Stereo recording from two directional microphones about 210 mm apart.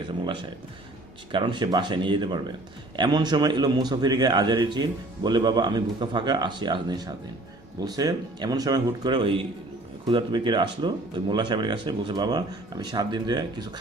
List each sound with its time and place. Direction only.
1.3 s a man's voice: 25° right (ahead or behind)